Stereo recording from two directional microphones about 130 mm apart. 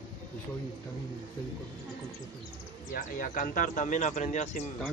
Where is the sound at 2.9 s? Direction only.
90° left; by 4.6 s 65° left (ahead or behind).